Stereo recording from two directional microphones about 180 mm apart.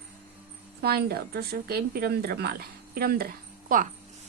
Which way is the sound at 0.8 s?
60° right (ahead or behind).